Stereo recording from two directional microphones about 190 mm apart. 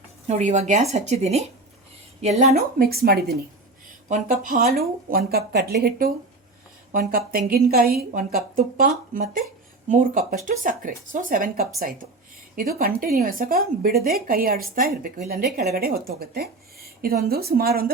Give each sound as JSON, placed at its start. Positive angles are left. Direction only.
{"t": 0.3, "sound": "a woman's voice", "side_deg": -35}
{"t": 2.4, "sound": "speech", "side_deg": -45}